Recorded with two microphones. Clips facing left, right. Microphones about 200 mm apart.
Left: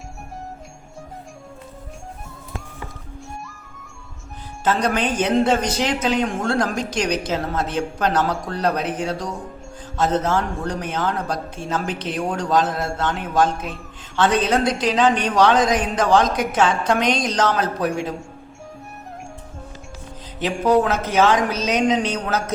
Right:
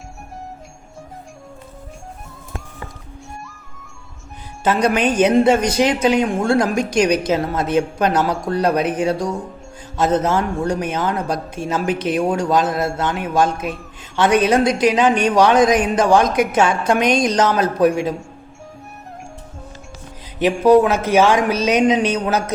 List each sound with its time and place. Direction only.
4.6 s speech: 10° right (ahead or behind)
20.4 s speech: 15° right (ahead or behind)